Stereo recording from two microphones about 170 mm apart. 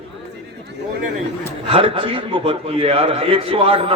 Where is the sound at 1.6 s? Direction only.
35° right (ahead or behind).